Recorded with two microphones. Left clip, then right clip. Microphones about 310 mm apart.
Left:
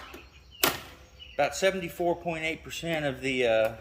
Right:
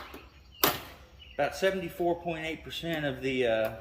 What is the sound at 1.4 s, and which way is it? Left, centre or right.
Speech, centre.